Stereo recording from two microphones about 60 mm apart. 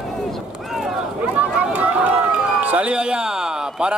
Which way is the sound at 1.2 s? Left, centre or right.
Right.